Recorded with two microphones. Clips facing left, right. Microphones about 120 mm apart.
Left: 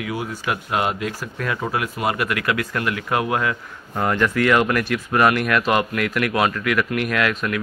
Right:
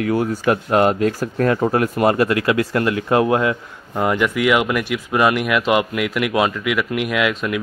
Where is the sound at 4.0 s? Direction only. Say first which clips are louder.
Right 1 dB; 10° right (ahead or behind).